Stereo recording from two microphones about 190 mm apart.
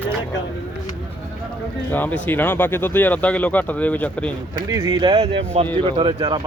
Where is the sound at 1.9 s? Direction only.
10° left (ahead or behind).